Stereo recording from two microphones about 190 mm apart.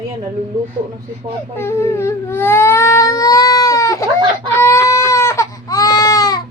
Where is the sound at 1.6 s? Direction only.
15° left (ahead or behind).